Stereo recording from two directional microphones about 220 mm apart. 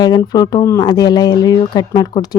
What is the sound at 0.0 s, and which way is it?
Speech, 20° left (ahead or behind).